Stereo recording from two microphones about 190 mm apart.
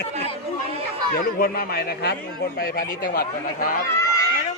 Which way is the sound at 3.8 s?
15° left (ahead or behind).